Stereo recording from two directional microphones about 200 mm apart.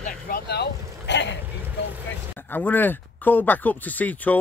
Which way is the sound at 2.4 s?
10° left (ahead or behind).